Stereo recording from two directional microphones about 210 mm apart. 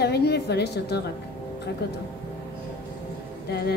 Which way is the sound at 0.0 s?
50° left (ahead or behind).